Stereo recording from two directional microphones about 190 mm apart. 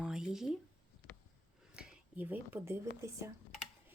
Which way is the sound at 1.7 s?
5° right (ahead or behind).